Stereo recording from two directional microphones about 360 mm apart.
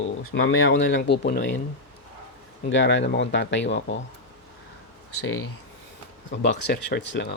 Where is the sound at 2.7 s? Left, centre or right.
Left.